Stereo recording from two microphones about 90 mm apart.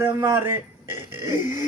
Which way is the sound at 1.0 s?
25° right (ahead or behind).